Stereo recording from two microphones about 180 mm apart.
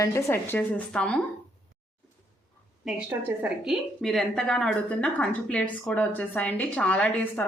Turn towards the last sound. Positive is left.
turn(degrees=5)  # may be behind; listen again after turning